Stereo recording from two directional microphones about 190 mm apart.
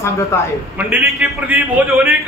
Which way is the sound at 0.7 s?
10° right (ahead or behind).